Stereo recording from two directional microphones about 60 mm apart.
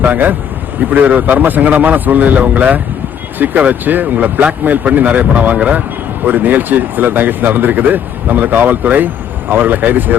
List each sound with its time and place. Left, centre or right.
0.0 s speech: right